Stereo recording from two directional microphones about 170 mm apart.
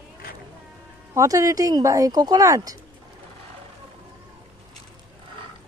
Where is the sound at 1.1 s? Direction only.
20° right (ahead or behind).